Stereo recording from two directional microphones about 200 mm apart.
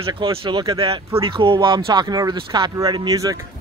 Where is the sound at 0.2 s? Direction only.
25° right (ahead or behind).